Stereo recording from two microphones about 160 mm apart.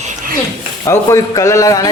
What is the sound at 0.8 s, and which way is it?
A man's voice, 20° left (ahead or behind).